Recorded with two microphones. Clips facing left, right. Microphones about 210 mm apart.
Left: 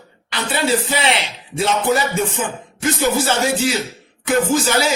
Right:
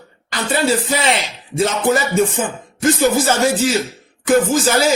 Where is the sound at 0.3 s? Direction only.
45° right (ahead or behind).